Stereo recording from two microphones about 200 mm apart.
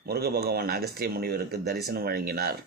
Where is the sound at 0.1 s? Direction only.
50° right (ahead or behind).